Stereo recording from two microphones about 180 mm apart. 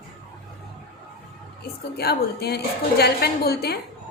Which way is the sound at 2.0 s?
60° left (ahead or behind).